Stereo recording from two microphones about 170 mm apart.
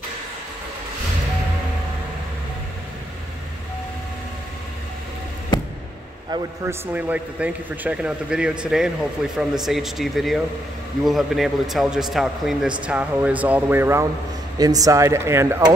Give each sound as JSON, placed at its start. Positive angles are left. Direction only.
{"t": 6.6, "sound": "a man's voice", "side_deg": -10}